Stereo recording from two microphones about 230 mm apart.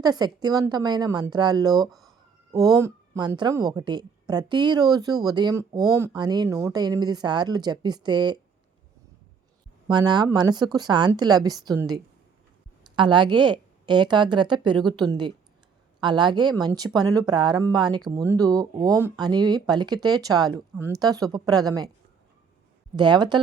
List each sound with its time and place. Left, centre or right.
0.0 s speech: centre
1.9 s speech: centre
2.5 s speech: centre
9.9 s a woman's voice: centre
23.0 s a woman's voice: centre